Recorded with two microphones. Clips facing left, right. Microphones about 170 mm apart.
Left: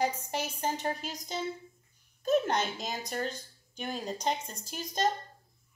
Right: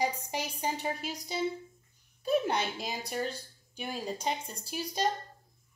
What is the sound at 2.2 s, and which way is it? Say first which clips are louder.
A woman's voice: left 1 dB; 5° right (ahead or behind).